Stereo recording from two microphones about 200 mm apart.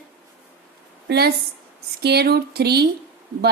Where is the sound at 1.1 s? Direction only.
55° right (ahead or behind).